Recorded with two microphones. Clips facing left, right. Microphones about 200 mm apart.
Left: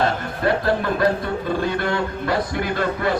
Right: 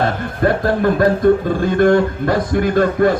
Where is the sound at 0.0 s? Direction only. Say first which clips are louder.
Right 4 dB; 50° right (ahead or behind).